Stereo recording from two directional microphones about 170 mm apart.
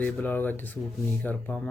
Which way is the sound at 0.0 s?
10° left (ahead or behind).